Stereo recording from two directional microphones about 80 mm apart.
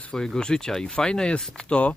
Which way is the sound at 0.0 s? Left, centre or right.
Centre.